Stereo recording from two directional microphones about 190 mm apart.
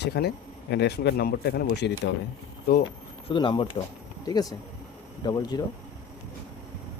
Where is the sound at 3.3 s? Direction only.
25° left (ahead or behind).